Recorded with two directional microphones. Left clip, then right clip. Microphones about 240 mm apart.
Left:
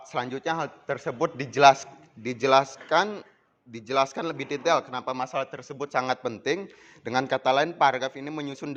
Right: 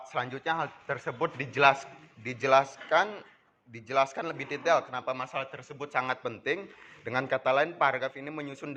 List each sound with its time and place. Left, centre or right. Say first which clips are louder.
0.1 s speech: left 3 dB; left